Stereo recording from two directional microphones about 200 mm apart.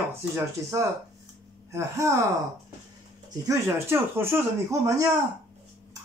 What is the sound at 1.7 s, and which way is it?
Speech, 15° right (ahead or behind).